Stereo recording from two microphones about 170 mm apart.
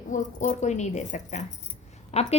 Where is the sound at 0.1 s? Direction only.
50° left (ahead or behind).